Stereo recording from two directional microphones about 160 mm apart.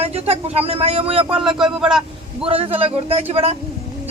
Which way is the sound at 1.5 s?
5° right (ahead or behind).